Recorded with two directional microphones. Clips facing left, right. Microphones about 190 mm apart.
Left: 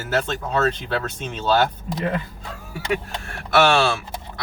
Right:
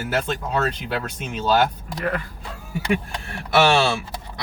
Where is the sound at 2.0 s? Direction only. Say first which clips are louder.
Left 1 dB; 25° left (ahead or behind).